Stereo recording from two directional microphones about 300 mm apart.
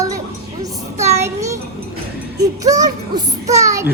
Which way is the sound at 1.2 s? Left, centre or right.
Centre.